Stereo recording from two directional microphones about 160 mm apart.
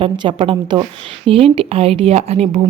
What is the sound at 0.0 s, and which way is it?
Speech, 30° right (ahead or behind).